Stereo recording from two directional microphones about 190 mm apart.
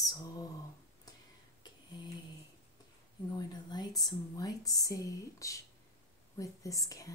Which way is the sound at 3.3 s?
20° left (ahead or behind).